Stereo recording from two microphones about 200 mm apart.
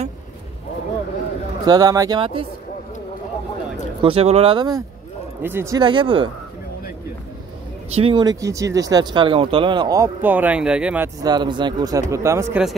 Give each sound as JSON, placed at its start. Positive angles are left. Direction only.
{"t": 1.7, "sound": "speech", "side_deg": -20}
{"t": 4.0, "sound": "speech", "side_deg": -30}
{"t": 7.9, "sound": "speech", "side_deg": -25}
{"t": 11.2, "sound": "speech", "side_deg": -20}